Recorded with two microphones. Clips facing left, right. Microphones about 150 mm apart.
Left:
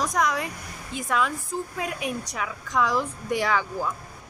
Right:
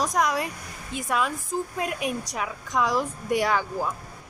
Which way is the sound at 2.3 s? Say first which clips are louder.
Left 3 dB; 15° right (ahead or behind).